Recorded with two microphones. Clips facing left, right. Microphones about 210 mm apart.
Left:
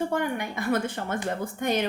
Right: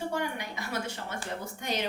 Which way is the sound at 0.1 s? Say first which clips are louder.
Left 5 dB; 55° left (ahead or behind).